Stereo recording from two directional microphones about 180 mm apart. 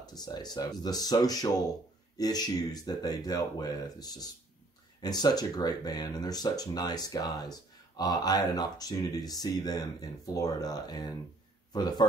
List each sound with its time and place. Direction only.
0.0 s speech: 20° left (ahead or behind)